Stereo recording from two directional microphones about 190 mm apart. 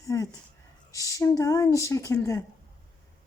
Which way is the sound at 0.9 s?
15° left (ahead or behind).